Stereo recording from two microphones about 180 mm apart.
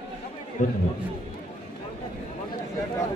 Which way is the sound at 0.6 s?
45° left (ahead or behind).